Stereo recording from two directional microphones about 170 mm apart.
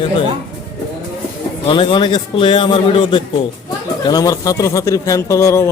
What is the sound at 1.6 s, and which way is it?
A man's voice, 30° left (ahead or behind).